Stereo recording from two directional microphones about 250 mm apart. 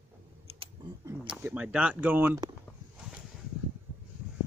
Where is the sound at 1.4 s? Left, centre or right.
Centre.